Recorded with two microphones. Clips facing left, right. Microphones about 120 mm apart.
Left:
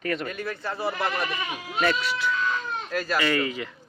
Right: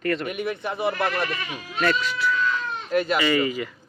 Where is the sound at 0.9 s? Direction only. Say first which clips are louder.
Right 1 dB; 5° left (ahead or behind).